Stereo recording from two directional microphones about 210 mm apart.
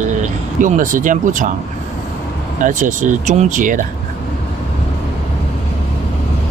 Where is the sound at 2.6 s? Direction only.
35° right (ahead or behind).